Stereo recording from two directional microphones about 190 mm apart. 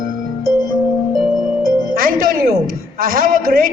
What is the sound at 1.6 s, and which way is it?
Music, 50° right (ahead or behind).